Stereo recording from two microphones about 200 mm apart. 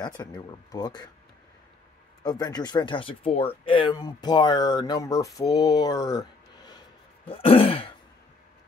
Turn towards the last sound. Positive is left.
turn(degrees=30)  # may be behind; listen again after turning